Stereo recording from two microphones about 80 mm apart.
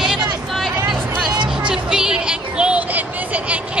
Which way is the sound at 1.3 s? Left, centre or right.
Right.